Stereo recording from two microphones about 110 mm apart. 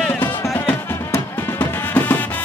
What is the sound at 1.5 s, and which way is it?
Music, 15° left (ahead or behind).